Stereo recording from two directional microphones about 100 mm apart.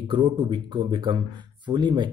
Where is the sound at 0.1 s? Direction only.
50° right (ahead or behind).